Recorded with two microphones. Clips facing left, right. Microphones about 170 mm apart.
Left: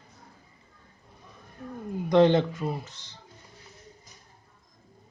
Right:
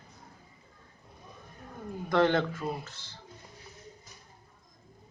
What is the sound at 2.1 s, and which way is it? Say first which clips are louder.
Speech: left 5 dB; 20° left (ahead or behind).